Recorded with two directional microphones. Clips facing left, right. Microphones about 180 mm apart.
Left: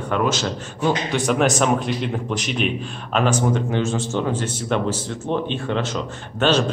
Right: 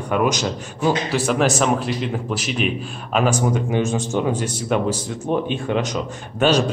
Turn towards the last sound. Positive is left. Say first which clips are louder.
# right 1 dB
turn(degrees=-10)  # may be behind; listen again after turning